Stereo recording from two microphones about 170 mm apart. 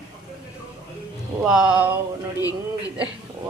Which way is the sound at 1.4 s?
5° right (ahead or behind).